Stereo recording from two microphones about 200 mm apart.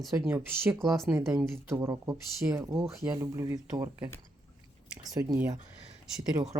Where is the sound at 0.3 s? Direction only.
10° right (ahead or behind).